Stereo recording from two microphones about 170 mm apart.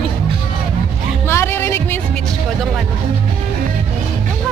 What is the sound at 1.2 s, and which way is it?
Music, 15° left (ahead or behind).